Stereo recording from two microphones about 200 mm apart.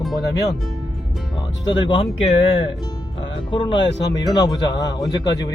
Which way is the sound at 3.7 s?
60° left (ahead or behind).